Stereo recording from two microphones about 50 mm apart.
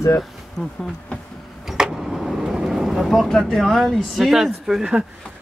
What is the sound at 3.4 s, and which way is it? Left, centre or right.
Speech, centre.